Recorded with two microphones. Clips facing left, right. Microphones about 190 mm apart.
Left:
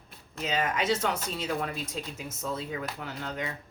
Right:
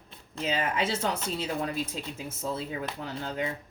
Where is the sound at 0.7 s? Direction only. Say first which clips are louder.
Left 1 dB; 30° right (ahead or behind).